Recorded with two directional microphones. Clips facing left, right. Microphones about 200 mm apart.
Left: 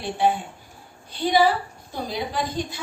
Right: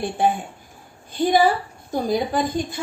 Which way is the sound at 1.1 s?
50° right (ahead or behind).